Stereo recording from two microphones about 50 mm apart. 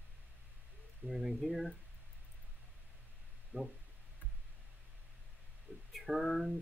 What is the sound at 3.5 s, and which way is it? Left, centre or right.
Speech, right.